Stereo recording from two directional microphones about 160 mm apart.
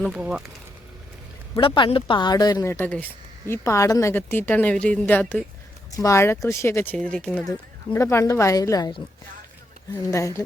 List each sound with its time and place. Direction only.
0.0 s speech: 5° right (ahead or behind)
1.5 s speech: 30° left (ahead or behind)